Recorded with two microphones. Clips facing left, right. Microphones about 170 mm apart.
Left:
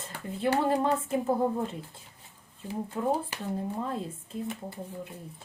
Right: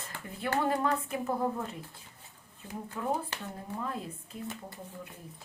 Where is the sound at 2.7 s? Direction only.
30° left (ahead or behind).